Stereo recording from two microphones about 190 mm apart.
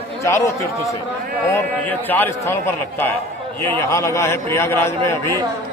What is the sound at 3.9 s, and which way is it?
Speech, 15° left (ahead or behind).